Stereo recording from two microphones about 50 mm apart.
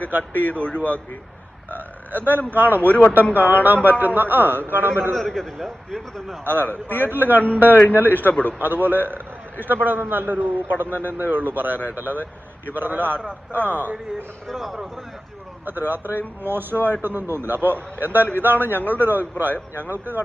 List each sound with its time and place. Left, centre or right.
0.3 s speech: left
1.7 s burping: right
2.8 s speech: left
3.3 s a man's voice: right
5.1 s a man's voice: centre
6.6 s a man's voice: left
7.1 s a man's voice: right
7.4 s a man's voice: left
8.5 s a man's voice: right
14.4 s speech: centre
15.6 s a man's voice: right
18.5 s a man's voice: left
18.9 s a man's voice: right